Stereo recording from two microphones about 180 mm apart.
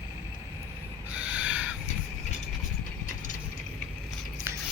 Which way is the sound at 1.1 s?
5° right (ahead or behind).